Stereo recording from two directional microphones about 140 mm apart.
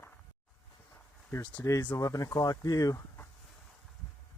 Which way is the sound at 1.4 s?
25° left (ahead or behind).